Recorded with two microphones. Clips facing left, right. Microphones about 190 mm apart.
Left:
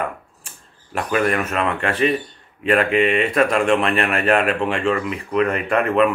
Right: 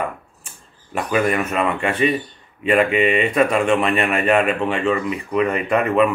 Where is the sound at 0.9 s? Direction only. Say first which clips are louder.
Right 1 dB; 5° right (ahead or behind).